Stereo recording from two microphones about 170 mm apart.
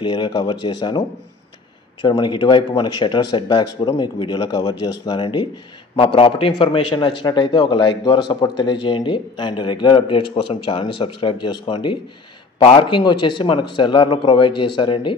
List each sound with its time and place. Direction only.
0.0 s a man's voice: 25° left (ahead or behind)